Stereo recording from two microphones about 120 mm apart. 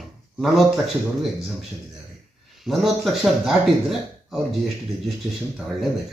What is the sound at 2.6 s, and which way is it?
Speech, centre (ahead or behind).